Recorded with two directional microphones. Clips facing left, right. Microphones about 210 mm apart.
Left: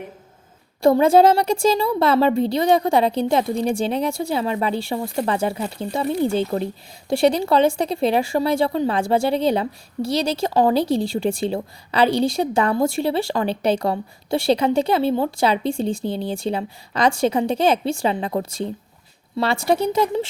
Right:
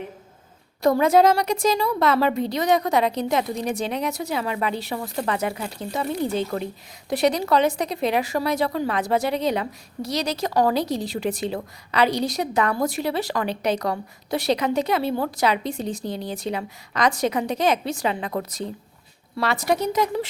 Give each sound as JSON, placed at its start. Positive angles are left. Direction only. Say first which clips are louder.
{"t": 0.8, "sound": "speech", "louder": "left 3 dB", "side_deg": 30}